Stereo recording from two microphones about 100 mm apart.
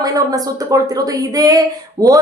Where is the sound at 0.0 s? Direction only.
40° right (ahead or behind).